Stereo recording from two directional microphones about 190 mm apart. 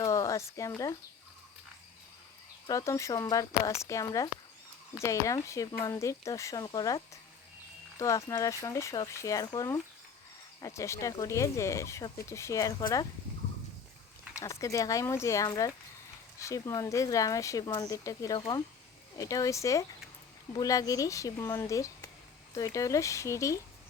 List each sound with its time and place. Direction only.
0.0 s a sound: 15° left (ahead or behind)
2.6 s speech: 15° left (ahead or behind)
14.3 s speech: 15° left (ahead or behind)